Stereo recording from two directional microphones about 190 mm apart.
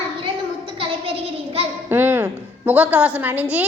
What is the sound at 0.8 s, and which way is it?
Child singing, 30° right (ahead or behind).